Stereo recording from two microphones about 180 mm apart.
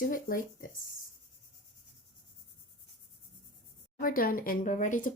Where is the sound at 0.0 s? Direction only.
50° left (ahead or behind).